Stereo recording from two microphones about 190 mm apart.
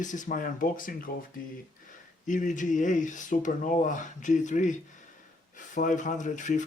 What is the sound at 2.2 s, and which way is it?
Speech, 40° left (ahead or behind).